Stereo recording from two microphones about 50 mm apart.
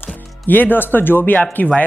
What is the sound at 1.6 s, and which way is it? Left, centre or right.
Speech, left.